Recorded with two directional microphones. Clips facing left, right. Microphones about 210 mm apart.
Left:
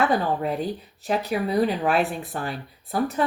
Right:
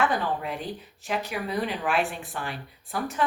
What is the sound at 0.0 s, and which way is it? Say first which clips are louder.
Speech: left 4 dB; 40° left (ahead or behind).